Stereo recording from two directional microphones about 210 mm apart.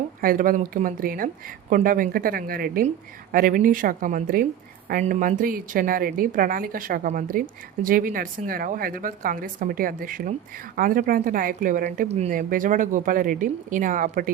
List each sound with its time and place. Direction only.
0.2 s a woman's voice: 40° right (ahead or behind)